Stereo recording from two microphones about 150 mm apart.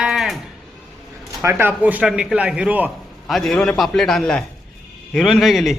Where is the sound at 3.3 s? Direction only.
Centre (ahead or behind).